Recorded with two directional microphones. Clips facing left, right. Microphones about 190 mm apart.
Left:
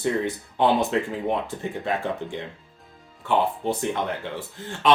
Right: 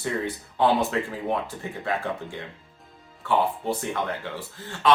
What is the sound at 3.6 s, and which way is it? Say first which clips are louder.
Speech: left 2 dB; 20° left (ahead or behind).